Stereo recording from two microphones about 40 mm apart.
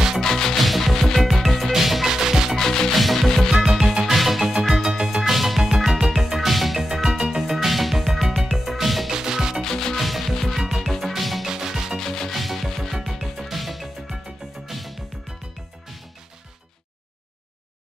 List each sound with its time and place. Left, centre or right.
0.2 s music: centre
0.6 s music: centre
2.5 s music: centre
2.9 s music: centre
4.8 s music: centre
5.1 s music: centre
9.1 s music: centre
9.6 s music: centre
9.9 s music: centre
11.4 s music: centre
12.0 s music: centre
12.3 s music: centre